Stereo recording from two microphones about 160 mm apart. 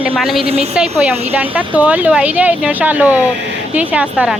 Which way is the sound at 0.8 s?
5° right (ahead or behind).